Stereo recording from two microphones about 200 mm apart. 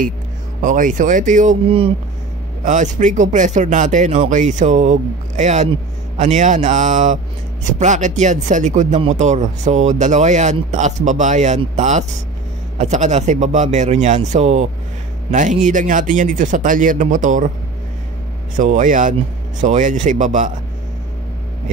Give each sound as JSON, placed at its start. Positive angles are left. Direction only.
{"t": 0.6, "sound": "speech", "side_deg": -40}
{"t": 18.6, "sound": "speech", "side_deg": -40}